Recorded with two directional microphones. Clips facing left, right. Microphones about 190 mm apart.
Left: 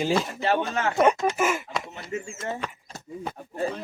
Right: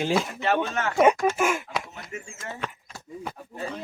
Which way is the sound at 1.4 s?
5° left (ahead or behind).